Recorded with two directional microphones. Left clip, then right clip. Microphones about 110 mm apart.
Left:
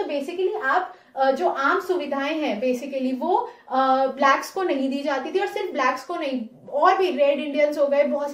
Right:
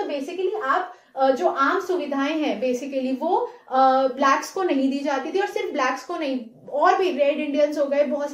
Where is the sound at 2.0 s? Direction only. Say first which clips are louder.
Right 1 dB; 30° right (ahead or behind).